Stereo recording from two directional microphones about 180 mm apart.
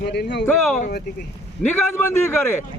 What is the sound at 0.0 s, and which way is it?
Speech, 65° left (ahead or behind).